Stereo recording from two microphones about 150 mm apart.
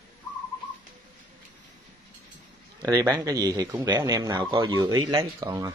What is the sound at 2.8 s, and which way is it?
Speech, 25° right (ahead or behind).